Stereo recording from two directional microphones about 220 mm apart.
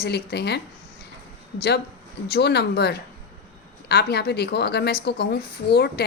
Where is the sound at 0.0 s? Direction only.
50° left (ahead or behind).